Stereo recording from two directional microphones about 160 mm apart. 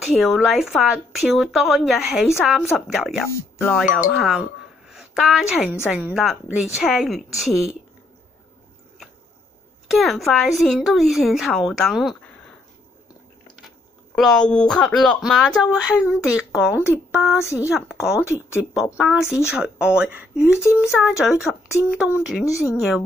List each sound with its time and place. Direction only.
0.0 s speech: centre (ahead or behind)
3.3 s speech: 15° left (ahead or behind)
3.7 s speech: centre (ahead or behind)
9.8 s speech: centre (ahead or behind)
14.1 s speech: 5° left (ahead or behind)
22.4 s a woman's voice: 20° left (ahead or behind)
22.8 s speech: centre (ahead or behind)